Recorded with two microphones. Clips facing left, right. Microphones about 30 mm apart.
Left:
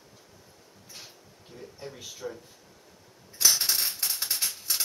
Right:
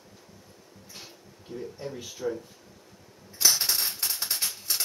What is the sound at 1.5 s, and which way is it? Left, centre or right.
Speech, centre.